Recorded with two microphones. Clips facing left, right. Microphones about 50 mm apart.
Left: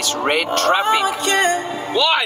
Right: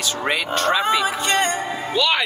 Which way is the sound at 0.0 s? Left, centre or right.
Left.